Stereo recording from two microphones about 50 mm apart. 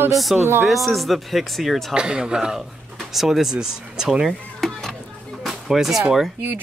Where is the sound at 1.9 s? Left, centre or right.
Centre.